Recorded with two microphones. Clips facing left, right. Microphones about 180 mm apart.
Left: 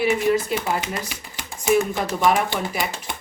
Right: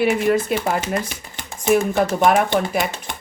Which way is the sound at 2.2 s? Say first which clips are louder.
Right 2 dB; 55° right (ahead or behind).